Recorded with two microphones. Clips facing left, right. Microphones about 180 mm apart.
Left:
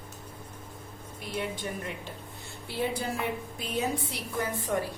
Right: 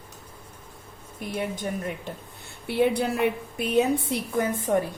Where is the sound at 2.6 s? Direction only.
65° right (ahead or behind).